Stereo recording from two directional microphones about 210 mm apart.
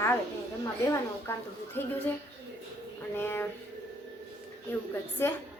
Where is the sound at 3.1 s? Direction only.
10° left (ahead or behind).